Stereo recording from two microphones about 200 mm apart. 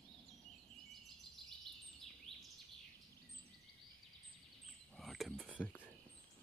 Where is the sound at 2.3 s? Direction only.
25° right (ahead or behind).